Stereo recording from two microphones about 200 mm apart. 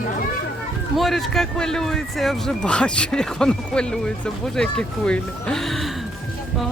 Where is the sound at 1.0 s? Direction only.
Centre (ahead or behind).